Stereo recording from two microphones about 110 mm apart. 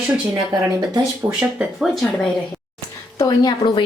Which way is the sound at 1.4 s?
5° right (ahead or behind).